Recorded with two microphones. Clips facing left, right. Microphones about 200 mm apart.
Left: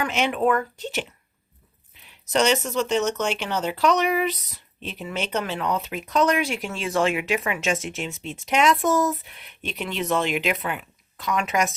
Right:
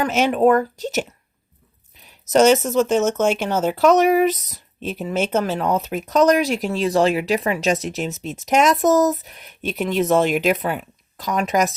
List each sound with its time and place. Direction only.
0.0 s speech: 40° right (ahead or behind)
2.0 s speech: 45° right (ahead or behind)